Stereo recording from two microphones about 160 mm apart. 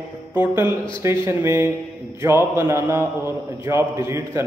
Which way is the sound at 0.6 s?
30° left (ahead or behind).